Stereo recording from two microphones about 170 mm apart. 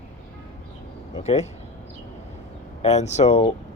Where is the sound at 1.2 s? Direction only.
40° left (ahead or behind).